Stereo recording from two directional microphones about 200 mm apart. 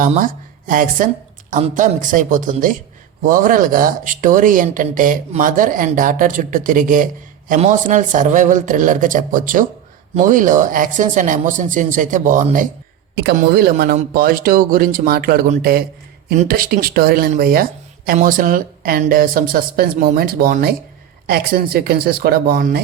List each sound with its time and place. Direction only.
0.7 s speech: 45° right (ahead or behind)
13.1 s speech: 55° right (ahead or behind)